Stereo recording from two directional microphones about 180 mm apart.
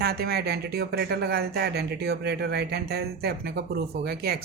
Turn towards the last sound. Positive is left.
turn(degrees=-60)  # may be behind; listen again after turning